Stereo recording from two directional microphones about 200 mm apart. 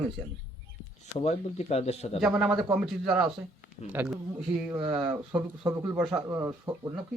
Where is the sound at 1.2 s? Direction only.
30° left (ahead or behind).